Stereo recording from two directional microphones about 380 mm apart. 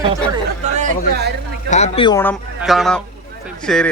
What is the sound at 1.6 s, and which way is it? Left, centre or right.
Speech, centre.